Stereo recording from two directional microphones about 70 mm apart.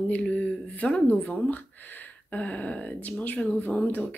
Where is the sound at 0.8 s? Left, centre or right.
Centre.